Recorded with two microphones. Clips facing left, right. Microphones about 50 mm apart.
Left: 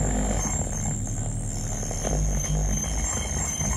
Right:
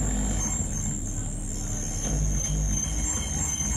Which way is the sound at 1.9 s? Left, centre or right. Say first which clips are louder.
Left 4 dB; left.